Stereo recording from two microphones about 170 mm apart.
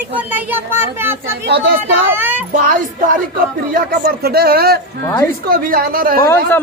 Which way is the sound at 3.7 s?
60° right (ahead or behind).